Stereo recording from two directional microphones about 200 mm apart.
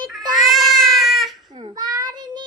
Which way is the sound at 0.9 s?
Centre (ahead or behind).